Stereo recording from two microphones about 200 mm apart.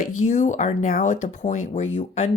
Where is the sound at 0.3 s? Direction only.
35° left (ahead or behind).